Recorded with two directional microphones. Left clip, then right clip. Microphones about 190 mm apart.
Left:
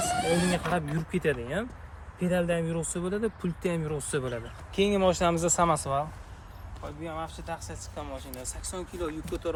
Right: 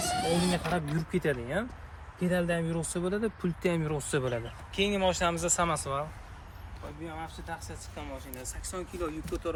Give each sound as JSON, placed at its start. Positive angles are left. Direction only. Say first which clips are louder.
{"t": 0.2, "sound": "speech", "louder": "left 2 dB", "side_deg": 0}
{"t": 0.5, "sound": "speech", "louder": "left 2 dB", "side_deg": -20}
{"t": 4.7, "sound": "speech", "louder": "left 3 dB", "side_deg": 50}
{"t": 6.8, "sound": "speech", "louder": "left 4 dB", "side_deg": 30}
{"t": 7.9, "sound": "speech", "louder": "left 3 dB", "side_deg": 10}